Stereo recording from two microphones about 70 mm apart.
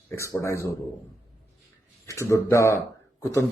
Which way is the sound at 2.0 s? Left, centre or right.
Left.